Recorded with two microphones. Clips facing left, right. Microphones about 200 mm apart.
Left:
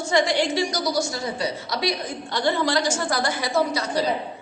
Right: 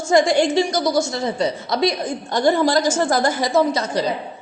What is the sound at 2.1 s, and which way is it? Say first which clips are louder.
A woman's voice: right 6 dB; 45° right (ahead or behind).